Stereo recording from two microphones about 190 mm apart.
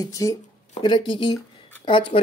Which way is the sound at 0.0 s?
15° left (ahead or behind).